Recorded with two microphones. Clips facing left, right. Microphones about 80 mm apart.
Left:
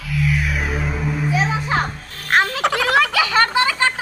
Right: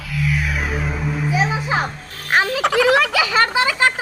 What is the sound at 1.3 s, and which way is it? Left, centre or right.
A child's voice, centre.